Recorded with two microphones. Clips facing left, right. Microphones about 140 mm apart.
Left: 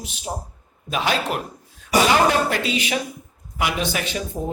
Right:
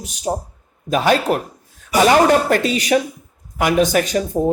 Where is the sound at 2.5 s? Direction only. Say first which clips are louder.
Right 7 dB; 45° right (ahead or behind).